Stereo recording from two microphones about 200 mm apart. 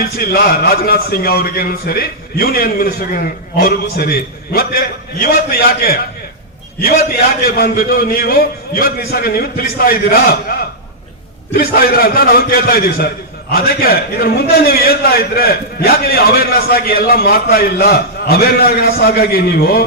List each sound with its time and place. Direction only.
0.2 s a man's voice: 50° left (ahead or behind)